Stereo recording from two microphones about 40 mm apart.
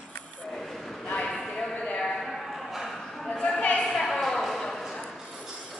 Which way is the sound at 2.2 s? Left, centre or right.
Centre.